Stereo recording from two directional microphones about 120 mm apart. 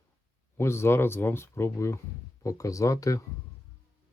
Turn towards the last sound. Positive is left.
turn(degrees=25)  # may be behind; listen again after turning